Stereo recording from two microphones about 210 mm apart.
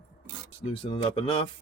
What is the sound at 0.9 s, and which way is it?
Speech, 25° left (ahead or behind).